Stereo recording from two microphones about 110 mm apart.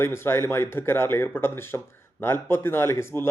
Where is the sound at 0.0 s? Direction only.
20° left (ahead or behind).